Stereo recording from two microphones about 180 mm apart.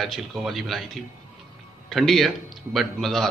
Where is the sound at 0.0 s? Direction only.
Centre (ahead or behind).